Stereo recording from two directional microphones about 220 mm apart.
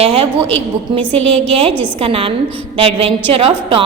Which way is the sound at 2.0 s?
25° right (ahead or behind).